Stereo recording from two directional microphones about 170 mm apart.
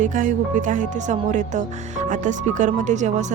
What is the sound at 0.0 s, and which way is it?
Speech, 50° right (ahead or behind).